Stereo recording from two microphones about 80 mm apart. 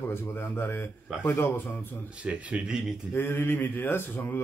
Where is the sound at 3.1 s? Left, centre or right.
Left.